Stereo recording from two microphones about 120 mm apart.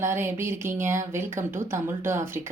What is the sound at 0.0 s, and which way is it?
Speech, 20° right (ahead or behind).